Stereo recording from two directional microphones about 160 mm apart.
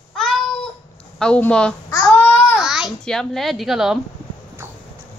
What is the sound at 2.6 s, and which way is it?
A child's voice, 5° right (ahead or behind).